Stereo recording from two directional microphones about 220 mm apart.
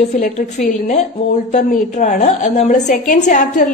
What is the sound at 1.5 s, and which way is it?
A woman's voice, 35° left (ahead or behind).